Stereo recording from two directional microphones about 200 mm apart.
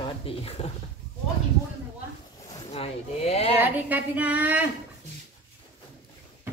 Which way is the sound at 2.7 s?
30° left (ahead or behind).